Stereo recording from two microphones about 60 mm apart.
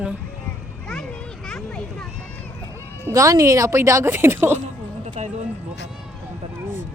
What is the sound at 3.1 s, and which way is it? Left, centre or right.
Speech, right.